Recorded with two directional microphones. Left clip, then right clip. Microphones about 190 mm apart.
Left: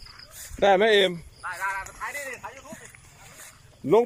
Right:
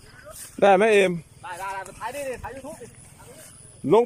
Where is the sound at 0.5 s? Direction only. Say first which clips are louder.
Right 2 dB; 10° right (ahead or behind).